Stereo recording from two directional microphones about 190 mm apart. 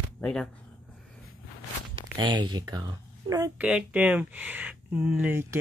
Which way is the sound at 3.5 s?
5° right (ahead or behind).